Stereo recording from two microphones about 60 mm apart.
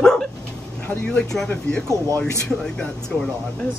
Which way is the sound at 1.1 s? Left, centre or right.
Centre.